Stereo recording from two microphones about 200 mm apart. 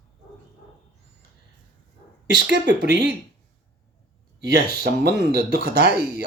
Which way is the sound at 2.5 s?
60° right (ahead or behind).